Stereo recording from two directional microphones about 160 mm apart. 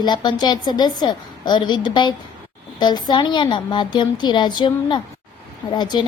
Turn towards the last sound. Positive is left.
turn(degrees=25)  # may be behind; listen again after turning